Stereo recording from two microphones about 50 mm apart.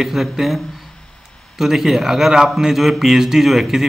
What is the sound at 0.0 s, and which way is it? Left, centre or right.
Speech, centre.